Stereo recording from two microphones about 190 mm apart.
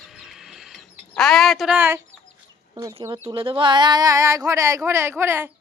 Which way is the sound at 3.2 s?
25° right (ahead or behind).